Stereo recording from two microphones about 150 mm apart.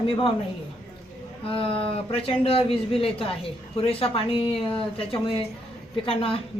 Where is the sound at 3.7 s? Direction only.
40° left (ahead or behind).